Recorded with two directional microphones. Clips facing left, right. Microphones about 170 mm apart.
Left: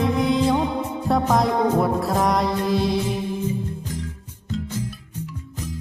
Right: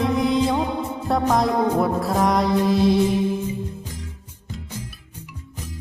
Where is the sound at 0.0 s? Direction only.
Centre (ahead or behind).